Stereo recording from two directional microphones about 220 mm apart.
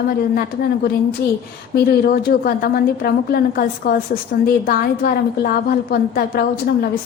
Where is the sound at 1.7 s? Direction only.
45° left (ahead or behind).